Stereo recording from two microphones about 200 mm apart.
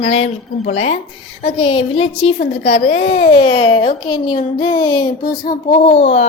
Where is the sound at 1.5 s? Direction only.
25° left (ahead or behind).